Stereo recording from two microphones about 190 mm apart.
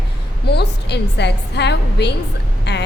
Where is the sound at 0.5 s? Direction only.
60° left (ahead or behind).